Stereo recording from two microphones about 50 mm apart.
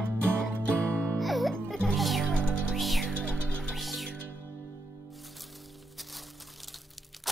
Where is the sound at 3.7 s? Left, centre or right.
Centre.